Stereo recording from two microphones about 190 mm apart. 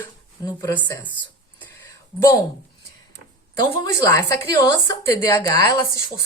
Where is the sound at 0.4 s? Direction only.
20° left (ahead or behind).